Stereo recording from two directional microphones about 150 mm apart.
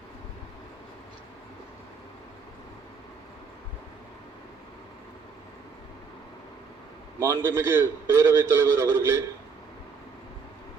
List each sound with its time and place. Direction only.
7.2 s a man's voice: 15° right (ahead or behind)